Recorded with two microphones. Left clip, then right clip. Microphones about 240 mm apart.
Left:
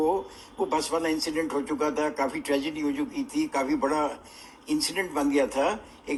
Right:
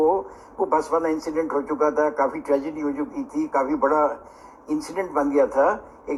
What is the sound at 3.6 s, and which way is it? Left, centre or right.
Speech, left.